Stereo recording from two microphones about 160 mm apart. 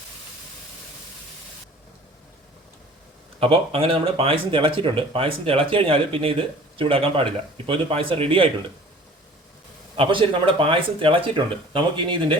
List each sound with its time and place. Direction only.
3.4 s speech: 35° right (ahead or behind)
9.9 s speech: 35° right (ahead or behind)